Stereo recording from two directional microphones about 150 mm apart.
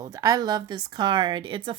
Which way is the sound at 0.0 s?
20° right (ahead or behind).